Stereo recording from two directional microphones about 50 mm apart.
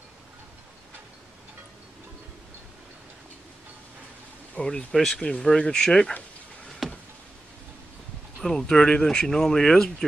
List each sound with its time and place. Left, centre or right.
4.6 s speech: centre
6.8 s a sound: centre
8.4 s speech: centre